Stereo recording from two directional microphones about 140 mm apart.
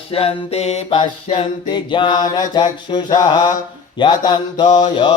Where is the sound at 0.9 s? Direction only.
35° left (ahead or behind).